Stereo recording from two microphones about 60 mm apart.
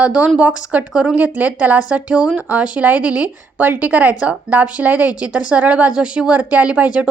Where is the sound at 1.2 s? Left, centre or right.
Right.